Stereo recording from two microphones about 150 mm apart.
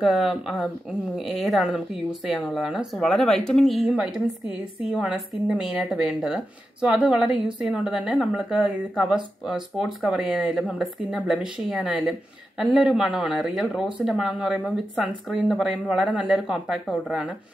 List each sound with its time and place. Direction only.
0.0 s a woman's voice: 5° right (ahead or behind)